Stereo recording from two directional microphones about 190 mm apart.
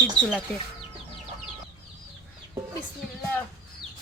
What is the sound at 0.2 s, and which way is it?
Chicken, 30° left (ahead or behind).